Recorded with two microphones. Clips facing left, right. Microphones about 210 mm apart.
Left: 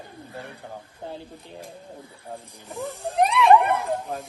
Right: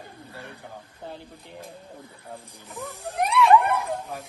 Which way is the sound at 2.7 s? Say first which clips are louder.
Left 5 dB; 15° left (ahead or behind).